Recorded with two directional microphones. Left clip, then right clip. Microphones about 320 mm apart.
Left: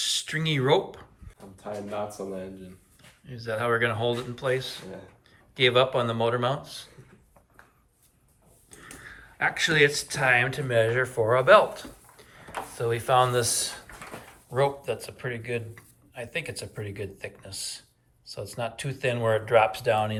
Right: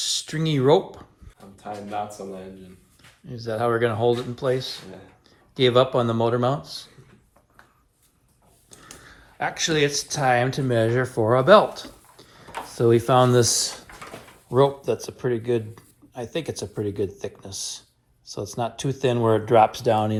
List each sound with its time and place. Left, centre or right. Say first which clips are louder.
0.0 s speech: right 1 dB; centre
1.4 s speech: right 1 dB; centre
3.2 s speech: right 3 dB; centre
4.7 s speech: right 3 dB; centre
5.5 s speech: right 3 dB; centre
8.8 s speech: left 2 dB; centre